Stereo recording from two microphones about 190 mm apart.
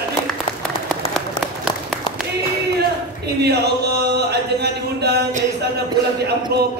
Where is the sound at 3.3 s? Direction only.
60° right (ahead or behind).